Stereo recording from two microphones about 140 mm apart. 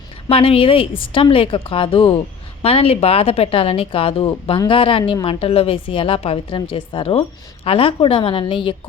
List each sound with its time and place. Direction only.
0.3 s a woman's voice: 40° left (ahead or behind)